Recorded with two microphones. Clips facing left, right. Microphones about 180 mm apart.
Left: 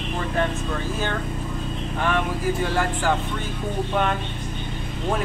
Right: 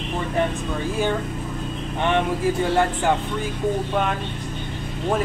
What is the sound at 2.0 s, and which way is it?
Speech, 25° right (ahead or behind).